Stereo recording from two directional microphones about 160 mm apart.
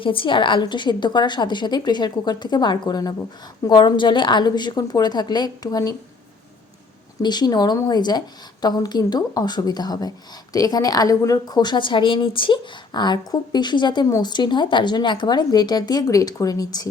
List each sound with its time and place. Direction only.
0.0 s a woman's voice: 35° left (ahead or behind)
7.2 s a woman's voice: 25° left (ahead or behind)